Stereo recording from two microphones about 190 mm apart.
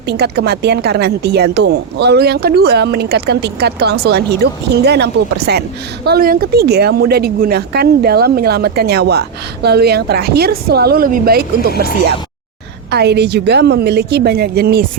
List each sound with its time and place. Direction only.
0.1 s speech: 60° right (ahead or behind)
12.9 s speech: 60° right (ahead or behind)